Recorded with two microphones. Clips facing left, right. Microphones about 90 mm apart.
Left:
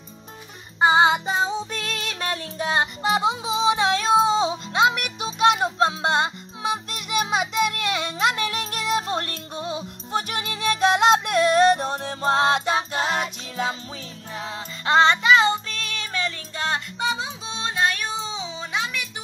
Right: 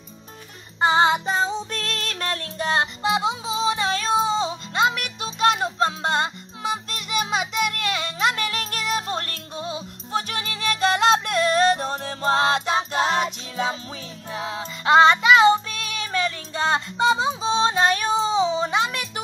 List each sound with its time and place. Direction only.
0.7 s music: 5° left (ahead or behind); by 16.3 s 10° right (ahead or behind)
16.5 s music: 20° right (ahead or behind); by 19.0 s 40° right (ahead or behind)